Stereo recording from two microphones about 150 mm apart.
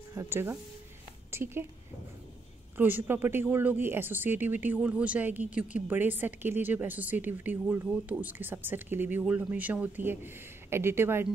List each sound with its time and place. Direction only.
0.1 s speech: 20° right (ahead or behind)
2.8 s speech: 15° right (ahead or behind)